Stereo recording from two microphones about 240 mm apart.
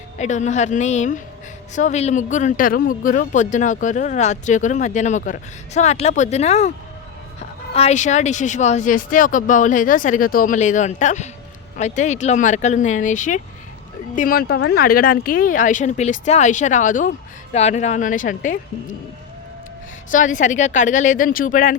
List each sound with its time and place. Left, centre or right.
0.2 s speech: left
20.1 s speech: left